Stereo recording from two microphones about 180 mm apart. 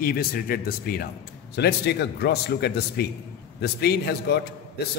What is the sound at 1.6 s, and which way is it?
A man's voice, 65° left (ahead or behind).